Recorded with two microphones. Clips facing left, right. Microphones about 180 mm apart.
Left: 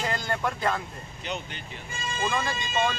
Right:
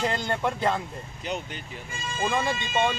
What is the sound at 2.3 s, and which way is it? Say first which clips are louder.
Speech: right 5 dB; 20° right (ahead or behind).